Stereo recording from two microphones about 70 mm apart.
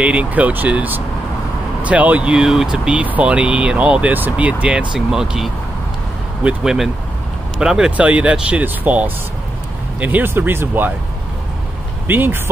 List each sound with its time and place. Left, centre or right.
0.0 s speech: centre
8.0 s speech: centre
12.1 s speech: right